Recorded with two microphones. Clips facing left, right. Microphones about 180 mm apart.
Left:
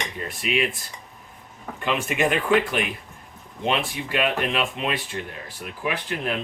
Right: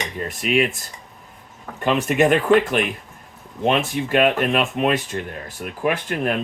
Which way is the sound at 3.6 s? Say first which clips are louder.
Right 5 dB; 45° right (ahead or behind).